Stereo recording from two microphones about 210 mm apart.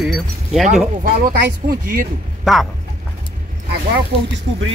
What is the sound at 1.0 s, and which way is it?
Speech, 40° right (ahead or behind).